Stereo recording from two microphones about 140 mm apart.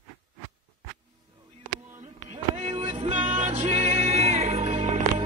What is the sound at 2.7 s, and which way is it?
Music, 50° right (ahead or behind).